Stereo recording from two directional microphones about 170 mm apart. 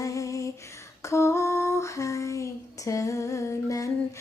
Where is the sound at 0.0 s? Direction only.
20° left (ahead or behind).